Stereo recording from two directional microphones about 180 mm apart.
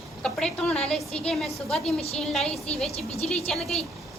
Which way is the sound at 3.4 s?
Centre (ahead or behind).